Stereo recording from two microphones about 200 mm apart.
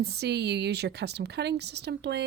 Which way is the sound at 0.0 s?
55° right (ahead or behind).